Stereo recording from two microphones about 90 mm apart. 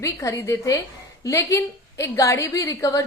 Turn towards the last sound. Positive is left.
turn(degrees=40)  # may be behind; listen again after turning